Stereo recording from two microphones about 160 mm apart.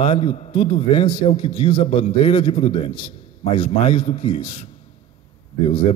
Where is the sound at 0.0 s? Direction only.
35° left (ahead or behind).